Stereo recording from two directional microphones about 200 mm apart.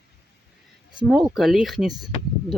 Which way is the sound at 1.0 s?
Centre (ahead or behind).